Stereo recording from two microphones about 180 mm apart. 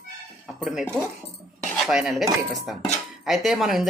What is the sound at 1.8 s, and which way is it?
A woman's voice, centre (ahead or behind).